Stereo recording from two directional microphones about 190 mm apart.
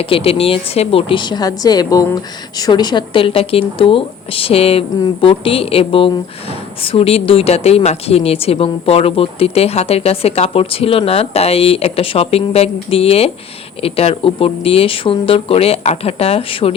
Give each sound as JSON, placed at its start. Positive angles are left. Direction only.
{"t": 0.0, "sound": "a woman's voice", "side_deg": 30}